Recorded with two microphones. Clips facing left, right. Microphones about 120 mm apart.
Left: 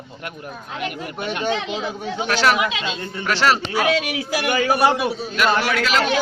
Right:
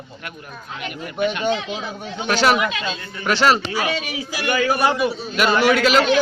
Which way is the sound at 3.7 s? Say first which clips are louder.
Left 4 dB; 65° left (ahead or behind).